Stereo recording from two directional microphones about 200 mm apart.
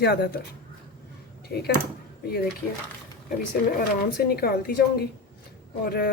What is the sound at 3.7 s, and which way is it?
Speech, 50° left (ahead or behind).